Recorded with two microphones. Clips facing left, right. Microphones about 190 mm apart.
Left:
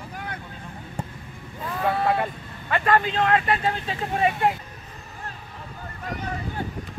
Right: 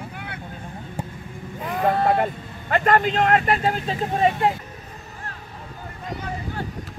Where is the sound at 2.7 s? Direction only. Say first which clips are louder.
Right 3 dB; 45° right (ahead or behind).